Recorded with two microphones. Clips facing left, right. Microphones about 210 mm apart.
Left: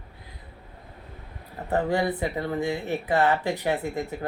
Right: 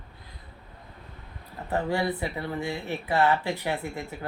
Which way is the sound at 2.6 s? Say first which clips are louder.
Left 5 dB; 20° left (ahead or behind).